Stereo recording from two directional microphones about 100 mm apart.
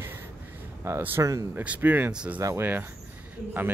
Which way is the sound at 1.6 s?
20° right (ahead or behind).